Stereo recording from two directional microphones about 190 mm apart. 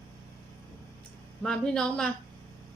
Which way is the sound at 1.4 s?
5° left (ahead or behind).